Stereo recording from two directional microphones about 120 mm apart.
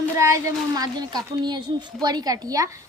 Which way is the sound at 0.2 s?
25° right (ahead or behind).